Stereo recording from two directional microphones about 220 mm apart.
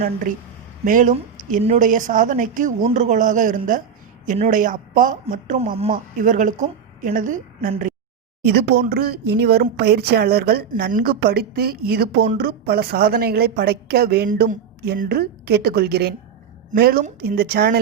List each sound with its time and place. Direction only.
0.9 s a woman's voice: 35° right (ahead or behind)
8.4 s speech: 45° right (ahead or behind)